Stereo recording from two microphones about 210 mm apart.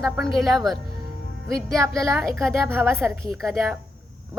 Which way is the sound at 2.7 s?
10° right (ahead or behind).